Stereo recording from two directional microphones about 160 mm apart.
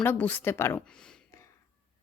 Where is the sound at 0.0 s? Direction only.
10° left (ahead or behind).